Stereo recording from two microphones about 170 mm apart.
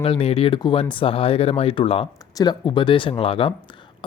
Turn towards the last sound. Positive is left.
turn(degrees=30)  # may be behind; listen again after turning